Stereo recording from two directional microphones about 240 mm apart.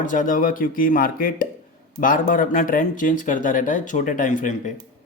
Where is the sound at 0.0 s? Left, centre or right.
Left.